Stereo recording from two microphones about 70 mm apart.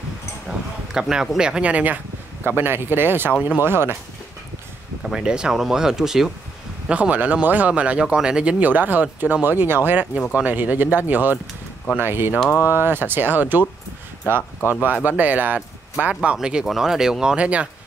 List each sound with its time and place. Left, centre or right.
0.5 s speech: centre
2.4 s speech: right
5.0 s speech: centre
6.9 s speech: centre
14.7 s speech: right